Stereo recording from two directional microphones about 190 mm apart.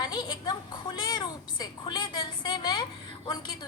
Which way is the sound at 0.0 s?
20° left (ahead or behind).